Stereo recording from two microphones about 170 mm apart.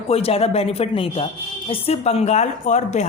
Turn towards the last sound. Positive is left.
turn(degrees=45)  # may be behind; listen again after turning